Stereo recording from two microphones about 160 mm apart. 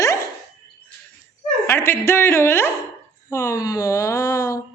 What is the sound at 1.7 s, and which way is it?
A woman's voice, 15° left (ahead or behind).